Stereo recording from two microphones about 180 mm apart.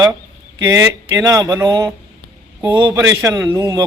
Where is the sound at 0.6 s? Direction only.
15° right (ahead or behind).